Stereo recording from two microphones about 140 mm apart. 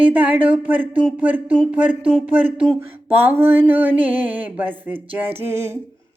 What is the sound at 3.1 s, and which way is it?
Speech, 15° right (ahead or behind).